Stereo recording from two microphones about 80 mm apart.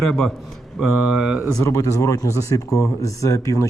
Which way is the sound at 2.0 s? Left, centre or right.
Left.